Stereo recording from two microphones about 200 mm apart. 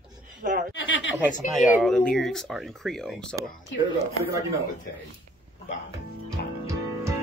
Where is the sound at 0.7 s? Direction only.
70° left (ahead or behind).